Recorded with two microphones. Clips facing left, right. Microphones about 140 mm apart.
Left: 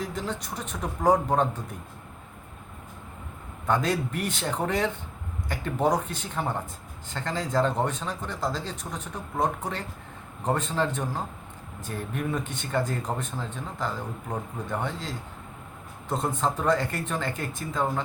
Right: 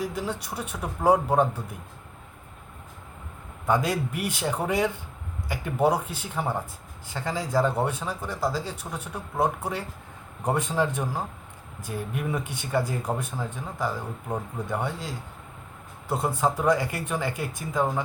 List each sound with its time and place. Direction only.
0.0 s speech: 10° right (ahead or behind)
3.7 s speech: 10° right (ahead or behind)